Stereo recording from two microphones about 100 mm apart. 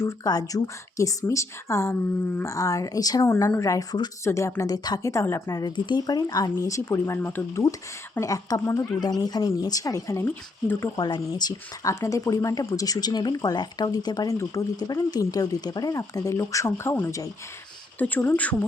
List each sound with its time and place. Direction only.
0.0 s speech: 40° left (ahead or behind)
5.5 s speech: 40° left (ahead or behind)
9.0 s speech: 40° left (ahead or behind)
18.0 s speech: 15° left (ahead or behind)